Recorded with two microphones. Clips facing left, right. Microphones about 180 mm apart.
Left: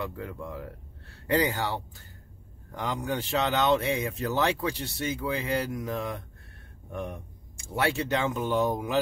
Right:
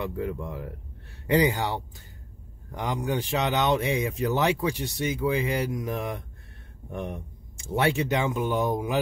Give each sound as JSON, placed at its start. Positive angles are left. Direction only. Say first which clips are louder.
{"t": 0.0, "sound": "speech", "louder": "right 5 dB", "side_deg": -20}